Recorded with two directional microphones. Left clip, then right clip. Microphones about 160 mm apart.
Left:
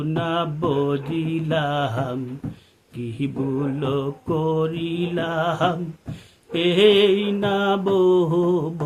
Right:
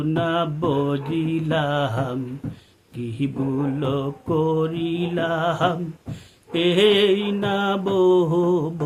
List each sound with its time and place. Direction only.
0.0 s mantra: 5° right (ahead or behind)